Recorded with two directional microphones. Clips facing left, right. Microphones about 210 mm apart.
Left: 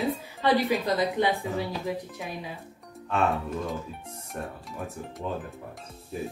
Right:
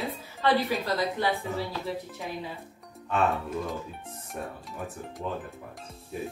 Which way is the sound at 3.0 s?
Centre (ahead or behind).